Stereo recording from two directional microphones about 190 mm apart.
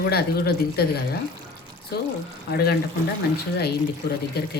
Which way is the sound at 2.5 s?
60° left (ahead or behind).